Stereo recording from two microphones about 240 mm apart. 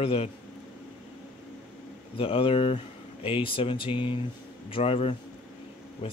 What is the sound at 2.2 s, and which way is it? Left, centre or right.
Speech, left.